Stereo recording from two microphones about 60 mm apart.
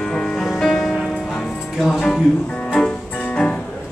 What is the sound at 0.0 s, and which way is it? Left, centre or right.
Music, centre.